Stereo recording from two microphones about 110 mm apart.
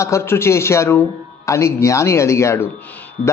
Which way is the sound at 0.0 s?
25° left (ahead or behind).